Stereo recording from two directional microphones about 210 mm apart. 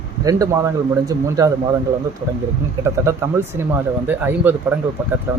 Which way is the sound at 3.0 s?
10° right (ahead or behind).